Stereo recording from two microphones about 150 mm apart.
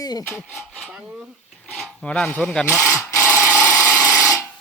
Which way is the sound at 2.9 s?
20° left (ahead or behind).